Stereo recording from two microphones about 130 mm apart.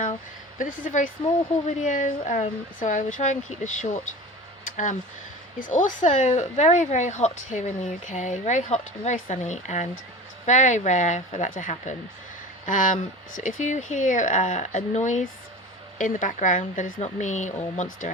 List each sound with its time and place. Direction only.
0.6 s speech: 80° left
4.6 s a sound: 75° left (ahead or behind)
5.5 s speech: 85° left
12.6 s speech: 85° left